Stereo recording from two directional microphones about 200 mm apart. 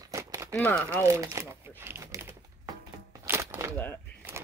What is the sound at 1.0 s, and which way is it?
Speech, 15° right (ahead or behind).